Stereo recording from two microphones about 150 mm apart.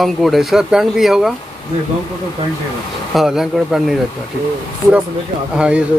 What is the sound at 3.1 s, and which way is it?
Speech, centre (ahead or behind).